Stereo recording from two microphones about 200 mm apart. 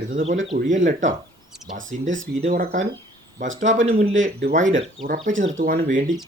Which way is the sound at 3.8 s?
30° right (ahead or behind).